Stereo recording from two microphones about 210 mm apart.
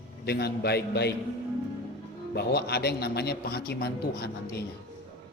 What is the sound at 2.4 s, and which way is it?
A man's voice, 50° left (ahead or behind).